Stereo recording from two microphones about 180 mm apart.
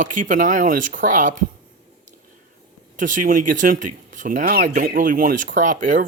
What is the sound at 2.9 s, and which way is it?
Speech, 45° right (ahead or behind).